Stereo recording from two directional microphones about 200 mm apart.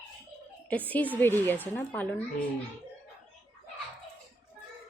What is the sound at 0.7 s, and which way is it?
A woman's voice, 10° left (ahead or behind).